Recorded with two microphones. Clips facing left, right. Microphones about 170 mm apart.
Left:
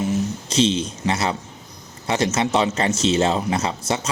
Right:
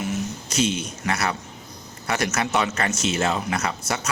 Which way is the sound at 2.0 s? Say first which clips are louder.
Left 4 dB; 25° left (ahead or behind).